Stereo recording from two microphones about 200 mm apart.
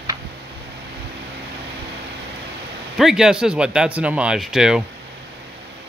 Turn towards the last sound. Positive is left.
turn(degrees=-5)  # may be behind; listen again after turning